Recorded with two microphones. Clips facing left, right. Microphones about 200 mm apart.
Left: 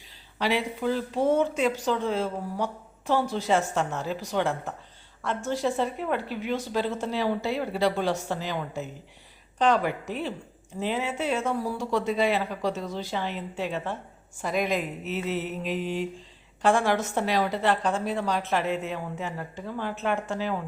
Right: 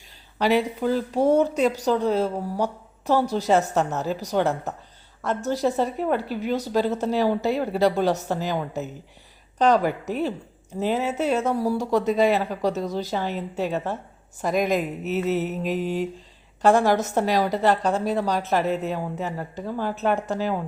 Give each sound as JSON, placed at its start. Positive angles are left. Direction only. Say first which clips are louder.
{"t": 0.3, "sound": "a woman's voice", "louder": "right 6 dB", "side_deg": -45}